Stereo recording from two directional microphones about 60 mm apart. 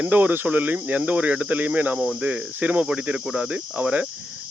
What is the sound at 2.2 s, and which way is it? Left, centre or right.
Speech, right.